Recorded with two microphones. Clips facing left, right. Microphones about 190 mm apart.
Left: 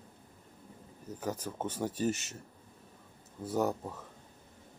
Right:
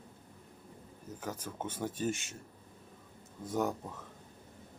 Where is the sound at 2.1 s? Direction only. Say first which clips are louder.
Left 2 dB; 40° left (ahead or behind).